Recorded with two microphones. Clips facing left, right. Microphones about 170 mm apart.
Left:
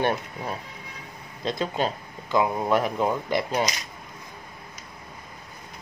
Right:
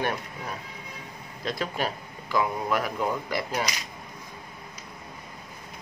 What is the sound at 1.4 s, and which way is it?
Speech, 20° left (ahead or behind).